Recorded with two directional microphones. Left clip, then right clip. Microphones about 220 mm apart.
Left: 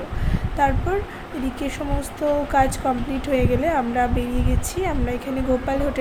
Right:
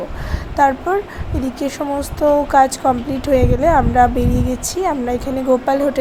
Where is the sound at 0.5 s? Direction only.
20° right (ahead or behind).